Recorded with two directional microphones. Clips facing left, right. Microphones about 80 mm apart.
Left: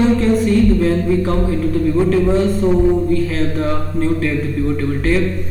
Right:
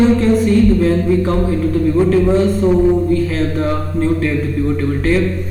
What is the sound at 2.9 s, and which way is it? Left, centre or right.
A man's voice, centre.